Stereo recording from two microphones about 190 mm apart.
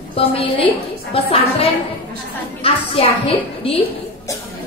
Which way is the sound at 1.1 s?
30° left (ahead or behind).